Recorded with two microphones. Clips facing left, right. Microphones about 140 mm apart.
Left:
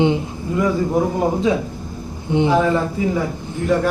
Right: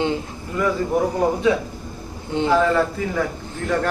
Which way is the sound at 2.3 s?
15° left (ahead or behind).